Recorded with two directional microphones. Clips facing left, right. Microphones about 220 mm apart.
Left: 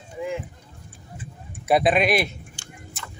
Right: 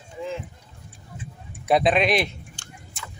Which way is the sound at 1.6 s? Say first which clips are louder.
Even; 5° left (ahead or behind).